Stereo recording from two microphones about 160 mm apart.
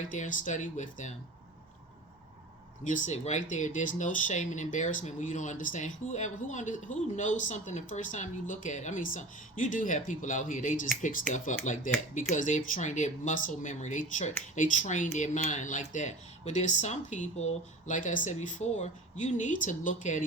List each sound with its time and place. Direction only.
0.1 s speech: 50° left (ahead or behind)
2.8 s speech: 50° left (ahead or behind)